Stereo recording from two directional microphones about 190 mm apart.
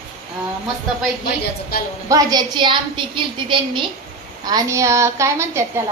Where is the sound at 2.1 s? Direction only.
20° right (ahead or behind).